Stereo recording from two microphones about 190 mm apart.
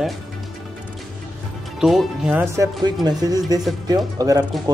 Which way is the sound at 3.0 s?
20° right (ahead or behind).